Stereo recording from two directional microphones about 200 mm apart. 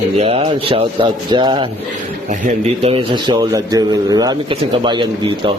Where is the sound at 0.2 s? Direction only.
30° right (ahead or behind).